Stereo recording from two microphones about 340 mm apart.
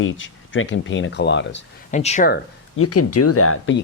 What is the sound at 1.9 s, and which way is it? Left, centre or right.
Speech, centre.